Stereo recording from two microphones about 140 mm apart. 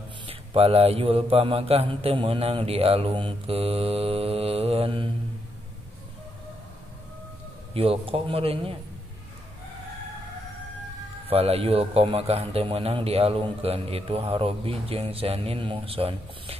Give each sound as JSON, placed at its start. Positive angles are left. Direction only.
{"t": 0.3, "sound": "a man's voice", "side_deg": -45}
{"t": 7.7, "sound": "a man's voice", "side_deg": -40}
{"t": 11.2, "sound": "a man's voice", "side_deg": -45}